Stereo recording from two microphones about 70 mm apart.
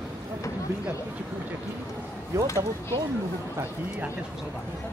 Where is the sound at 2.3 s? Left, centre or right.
Right.